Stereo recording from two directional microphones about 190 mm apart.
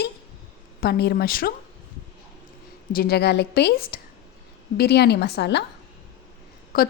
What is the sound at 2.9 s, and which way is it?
A woman's voice, 55° left (ahead or behind).